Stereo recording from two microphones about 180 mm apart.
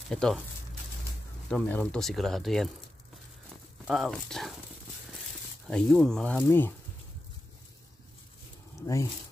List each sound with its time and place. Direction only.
0.1 s speech: 5° left (ahead or behind)
1.5 s speech: 5° left (ahead or behind)
3.8 s speech: centre (ahead or behind)
5.7 s speech: 5° left (ahead or behind)
8.8 s speech: 20° left (ahead or behind)